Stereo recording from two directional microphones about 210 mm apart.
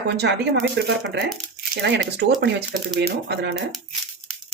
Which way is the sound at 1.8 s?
55° right (ahead or behind).